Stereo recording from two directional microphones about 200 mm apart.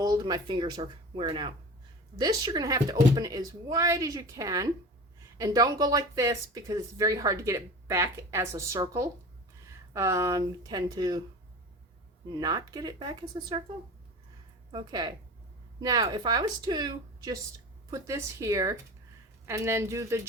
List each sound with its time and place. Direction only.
0.0 s speech: 20° right (ahead or behind)
12.3 s speech: 20° right (ahead or behind)
14.7 s speech: 20° right (ahead or behind)